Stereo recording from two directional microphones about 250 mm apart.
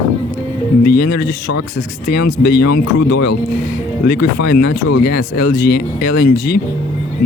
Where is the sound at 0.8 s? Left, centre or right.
Left.